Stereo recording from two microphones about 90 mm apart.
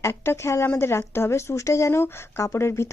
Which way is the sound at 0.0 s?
30° left (ahead or behind).